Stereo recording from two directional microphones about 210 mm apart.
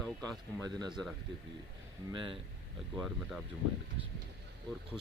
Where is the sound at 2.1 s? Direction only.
25° right (ahead or behind).